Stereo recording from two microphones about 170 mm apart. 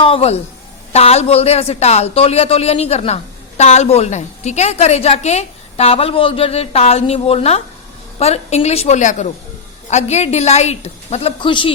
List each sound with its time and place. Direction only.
0.0 s a woman's voice: 35° left (ahead or behind)